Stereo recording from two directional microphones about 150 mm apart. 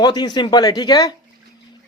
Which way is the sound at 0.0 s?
25° left (ahead or behind).